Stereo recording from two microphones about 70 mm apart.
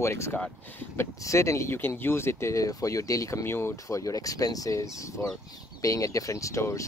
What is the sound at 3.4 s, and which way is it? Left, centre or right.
Speech, left.